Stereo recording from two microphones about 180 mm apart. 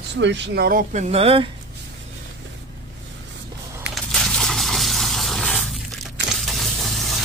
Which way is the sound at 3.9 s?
Centre (ahead or behind).